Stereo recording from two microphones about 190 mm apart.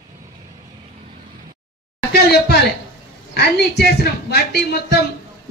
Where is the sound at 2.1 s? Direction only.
60° left (ahead or behind).